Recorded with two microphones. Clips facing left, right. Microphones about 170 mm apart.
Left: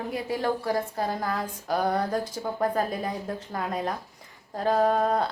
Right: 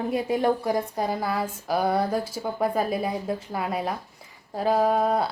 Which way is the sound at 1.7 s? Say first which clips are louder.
Right 2 dB; 10° right (ahead or behind).